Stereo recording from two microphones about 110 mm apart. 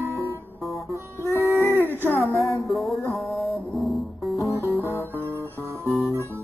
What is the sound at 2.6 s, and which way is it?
Music, centre (ahead or behind).